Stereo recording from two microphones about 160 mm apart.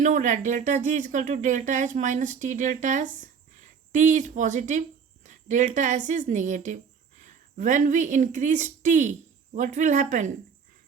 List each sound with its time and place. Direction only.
0.0 s speech: 50° right (ahead or behind)
5.2 s a sound: 50° right (ahead or behind)
6.1 s speech: 50° right (ahead or behind)